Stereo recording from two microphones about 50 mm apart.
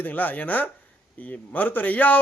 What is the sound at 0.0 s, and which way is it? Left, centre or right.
A man's voice, left.